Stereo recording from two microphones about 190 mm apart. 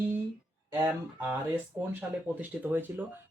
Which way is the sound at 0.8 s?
10° right (ahead or behind).